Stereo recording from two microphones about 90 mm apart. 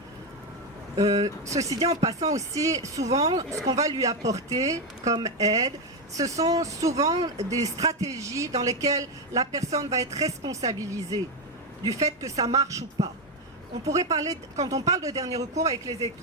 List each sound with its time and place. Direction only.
1.2 s speech: 40° right (ahead or behind)